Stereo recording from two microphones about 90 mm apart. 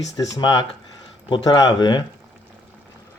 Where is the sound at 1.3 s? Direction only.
65° left (ahead or behind).